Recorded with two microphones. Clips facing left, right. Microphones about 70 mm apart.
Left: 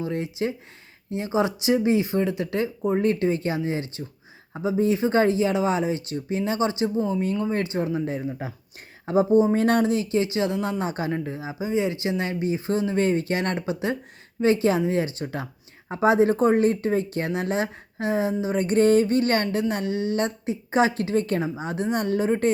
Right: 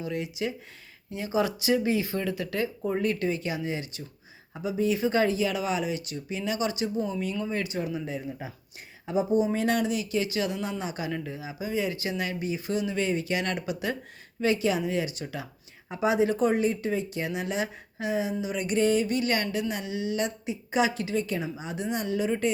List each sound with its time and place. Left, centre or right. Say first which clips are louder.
0.0 s speech: left 4 dB; left
13.6 s speech: left 4 dB; left